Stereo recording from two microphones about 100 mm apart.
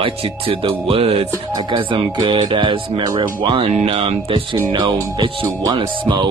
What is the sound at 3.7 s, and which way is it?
Speech, 80° right.